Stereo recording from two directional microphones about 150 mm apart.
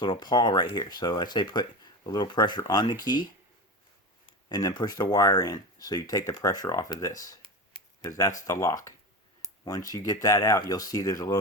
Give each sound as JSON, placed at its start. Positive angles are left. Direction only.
{"t": 0.0, "sound": "speech", "side_deg": 30}
{"t": 4.4, "sound": "speech", "side_deg": 25}